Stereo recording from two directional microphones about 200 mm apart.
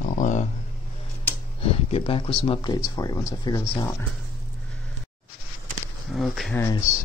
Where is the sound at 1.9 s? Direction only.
30° left (ahead or behind); by 4.0 s 15° left (ahead or behind).